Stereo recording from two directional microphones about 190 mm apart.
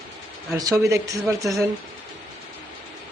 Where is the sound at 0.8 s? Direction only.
15° right (ahead or behind).